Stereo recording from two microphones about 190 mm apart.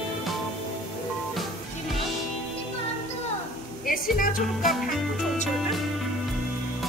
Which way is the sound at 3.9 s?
45° left (ahead or behind).